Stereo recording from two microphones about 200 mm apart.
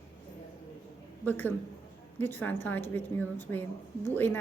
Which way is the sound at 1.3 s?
10° left (ahead or behind).